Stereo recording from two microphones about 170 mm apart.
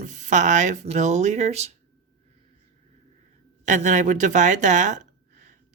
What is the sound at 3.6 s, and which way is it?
Speech, 45° right (ahead or behind).